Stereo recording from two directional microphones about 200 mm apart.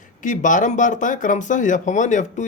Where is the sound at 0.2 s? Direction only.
40° left (ahead or behind).